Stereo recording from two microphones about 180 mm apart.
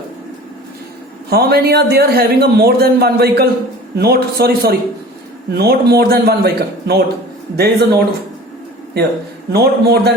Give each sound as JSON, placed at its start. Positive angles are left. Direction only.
{"t": 1.3, "sound": "a man's voice", "side_deg": -60}
{"t": 9.5, "sound": "a man's voice", "side_deg": -65}